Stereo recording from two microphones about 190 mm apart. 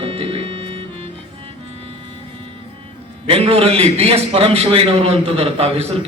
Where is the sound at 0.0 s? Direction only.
30° right (ahead or behind).